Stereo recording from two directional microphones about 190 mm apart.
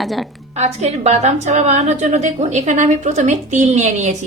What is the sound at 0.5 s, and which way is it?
A woman's voice, 35° right (ahead or behind).